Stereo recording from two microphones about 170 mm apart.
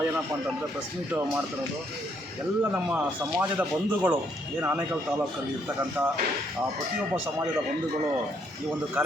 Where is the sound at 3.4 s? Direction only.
10° right (ahead or behind).